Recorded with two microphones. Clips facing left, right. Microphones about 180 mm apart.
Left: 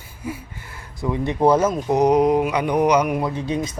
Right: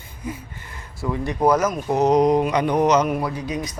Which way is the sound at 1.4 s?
30° left (ahead or behind).